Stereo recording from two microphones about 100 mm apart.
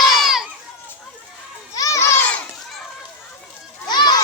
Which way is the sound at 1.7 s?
35° left (ahead or behind).